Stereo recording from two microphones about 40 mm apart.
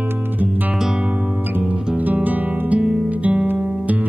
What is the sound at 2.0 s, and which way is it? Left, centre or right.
Guitar, right.